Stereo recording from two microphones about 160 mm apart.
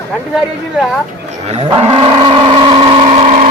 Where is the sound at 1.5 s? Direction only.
35° right (ahead or behind).